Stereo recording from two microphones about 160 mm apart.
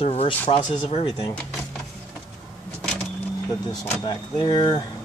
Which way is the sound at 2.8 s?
5° left (ahead or behind).